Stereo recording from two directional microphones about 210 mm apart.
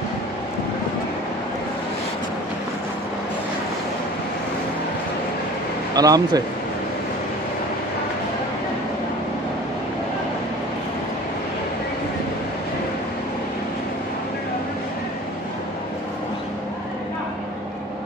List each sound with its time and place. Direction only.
5.9 s speech: 15° right (ahead or behind)